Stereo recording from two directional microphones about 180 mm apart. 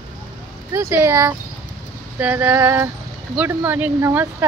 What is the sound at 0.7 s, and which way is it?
Speech, 15° right (ahead or behind).